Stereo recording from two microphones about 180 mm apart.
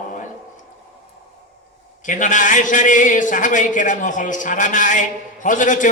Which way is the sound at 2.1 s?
45° left (ahead or behind).